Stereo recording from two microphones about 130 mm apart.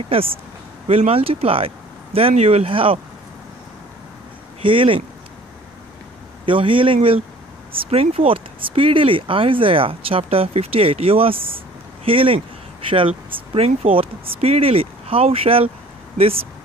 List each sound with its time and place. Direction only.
0.1 s speech: 45° right (ahead or behind)
4.6 s speech: 45° right (ahead or behind)
6.4 s speech: 40° right (ahead or behind)